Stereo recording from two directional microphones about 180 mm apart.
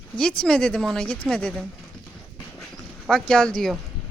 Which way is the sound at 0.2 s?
5° left (ahead or behind).